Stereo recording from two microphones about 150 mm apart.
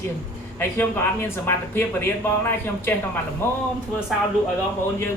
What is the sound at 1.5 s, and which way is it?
Speech, 15° left (ahead or behind).